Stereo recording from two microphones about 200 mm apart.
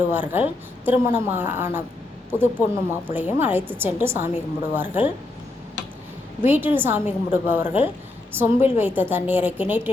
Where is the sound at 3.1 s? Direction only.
10° right (ahead or behind).